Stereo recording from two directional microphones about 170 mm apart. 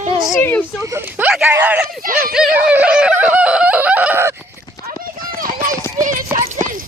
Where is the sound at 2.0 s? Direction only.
55° right (ahead or behind).